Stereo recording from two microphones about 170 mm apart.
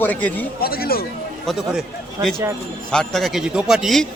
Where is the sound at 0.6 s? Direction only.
65° left (ahead or behind).